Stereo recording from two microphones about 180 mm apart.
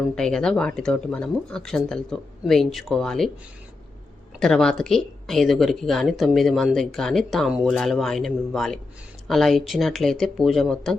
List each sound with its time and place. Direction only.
0.2 s speech: 5° left (ahead or behind)
4.4 s speech: 5° left (ahead or behind)